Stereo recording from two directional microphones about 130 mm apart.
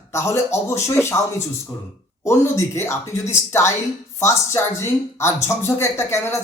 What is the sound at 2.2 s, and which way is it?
Speech, 20° left (ahead or behind).